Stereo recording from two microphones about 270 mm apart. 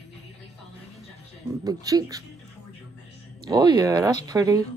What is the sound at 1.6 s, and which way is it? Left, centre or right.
Speech, centre.